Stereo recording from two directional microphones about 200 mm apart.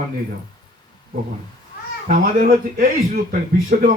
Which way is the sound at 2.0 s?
45° right (ahead or behind).